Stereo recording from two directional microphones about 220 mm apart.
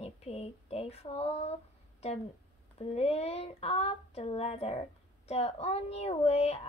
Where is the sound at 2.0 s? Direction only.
30° left (ahead or behind).